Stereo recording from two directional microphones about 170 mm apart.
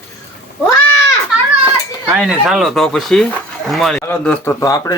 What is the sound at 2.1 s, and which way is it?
Speech, 5° right (ahead or behind).